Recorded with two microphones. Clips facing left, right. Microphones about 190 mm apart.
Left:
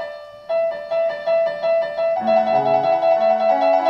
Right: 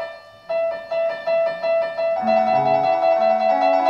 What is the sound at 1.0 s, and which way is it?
Music, 25° left (ahead or behind).